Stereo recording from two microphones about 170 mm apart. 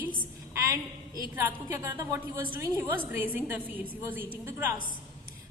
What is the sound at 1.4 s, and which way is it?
A woman's voice, 15° right (ahead or behind).